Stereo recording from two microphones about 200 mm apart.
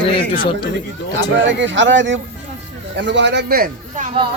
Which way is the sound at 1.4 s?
65° right (ahead or behind).